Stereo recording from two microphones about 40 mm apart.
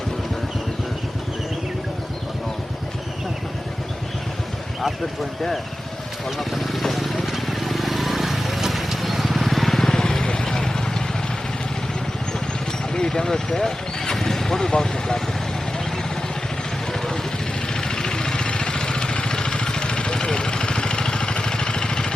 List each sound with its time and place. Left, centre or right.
6.2 s vehicle: centre
12.9 s speech: centre
16.9 s vehicle: centre